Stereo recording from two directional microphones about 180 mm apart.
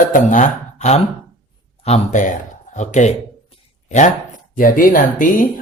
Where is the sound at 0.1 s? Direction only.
45° left (ahead or behind).